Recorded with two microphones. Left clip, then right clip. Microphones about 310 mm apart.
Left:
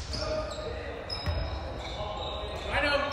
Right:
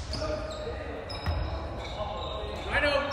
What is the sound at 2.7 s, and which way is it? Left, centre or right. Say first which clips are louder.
Basketball bounce: right 2 dB; centre.